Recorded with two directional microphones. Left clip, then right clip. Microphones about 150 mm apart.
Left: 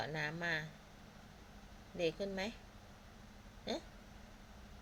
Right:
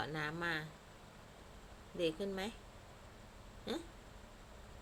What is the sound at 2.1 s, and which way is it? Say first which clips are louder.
Speech: even; 15° right (ahead or behind).